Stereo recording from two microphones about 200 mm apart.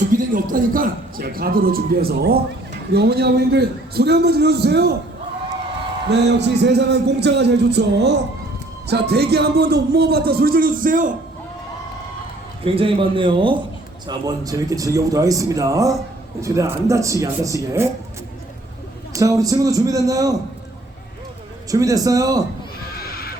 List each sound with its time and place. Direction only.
0.1 s a man's voice: 45° right (ahead or behind)
6.1 s a man's voice: 60° right (ahead or behind); by 11.1 s 40° right (ahead or behind)
12.6 s a man's voice: 25° right (ahead or behind)
19.1 s speech: 15° right (ahead or behind)
21.7 s speech: 15° right (ahead or behind)
23.0 s neigh: 50° left (ahead or behind)